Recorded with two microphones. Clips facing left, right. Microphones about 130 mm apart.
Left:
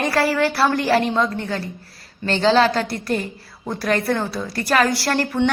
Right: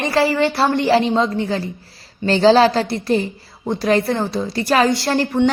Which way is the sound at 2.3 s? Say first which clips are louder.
Right 4 dB; 35° right (ahead or behind).